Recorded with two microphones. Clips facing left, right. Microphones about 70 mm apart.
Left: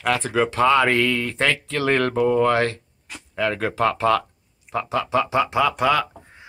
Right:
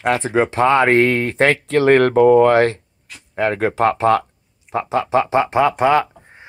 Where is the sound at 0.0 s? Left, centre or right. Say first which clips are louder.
Right 4 dB; right.